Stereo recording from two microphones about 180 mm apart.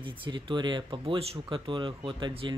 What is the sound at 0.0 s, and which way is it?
Speech, 25° right (ahead or behind).